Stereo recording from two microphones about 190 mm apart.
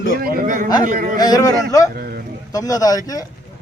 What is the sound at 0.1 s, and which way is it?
A man's voice, 50° right (ahead or behind).